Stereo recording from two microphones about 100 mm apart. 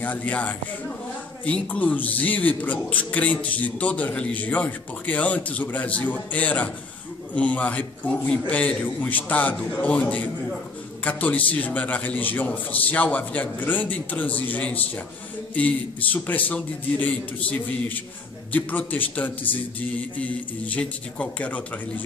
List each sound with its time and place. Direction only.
0.0 s a man's voice: 15° left (ahead or behind)